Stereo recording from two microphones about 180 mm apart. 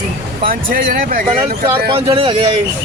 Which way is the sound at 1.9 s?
30° right (ahead or behind).